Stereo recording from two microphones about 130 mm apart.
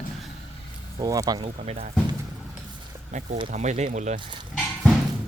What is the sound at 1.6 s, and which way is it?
Speech, 60° right (ahead or behind).